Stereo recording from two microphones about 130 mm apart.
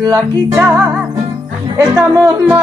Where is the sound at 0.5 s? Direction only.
15° right (ahead or behind).